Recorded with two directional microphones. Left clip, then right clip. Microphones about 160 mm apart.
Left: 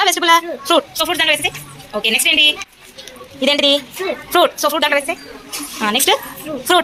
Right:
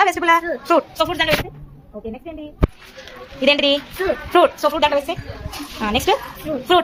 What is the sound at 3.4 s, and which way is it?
A woman's voice, 5° right (ahead or behind).